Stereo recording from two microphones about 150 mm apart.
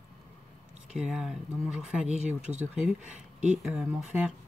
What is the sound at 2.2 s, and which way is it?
Speech, 50° right (ahead or behind).